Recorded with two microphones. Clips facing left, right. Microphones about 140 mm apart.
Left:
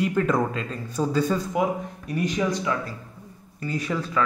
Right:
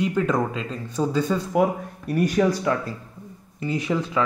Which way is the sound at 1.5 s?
35° right (ahead or behind).